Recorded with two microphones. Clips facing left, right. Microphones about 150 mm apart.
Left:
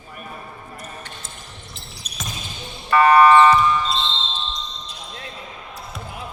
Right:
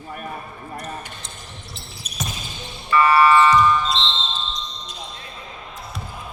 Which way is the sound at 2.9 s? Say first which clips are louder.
Left 3 dB; 60° left (ahead or behind).